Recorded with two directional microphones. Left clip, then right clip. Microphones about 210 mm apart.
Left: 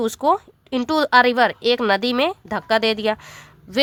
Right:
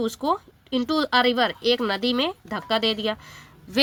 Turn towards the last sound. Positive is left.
turn(degrees=30)  # may be behind; listen again after turning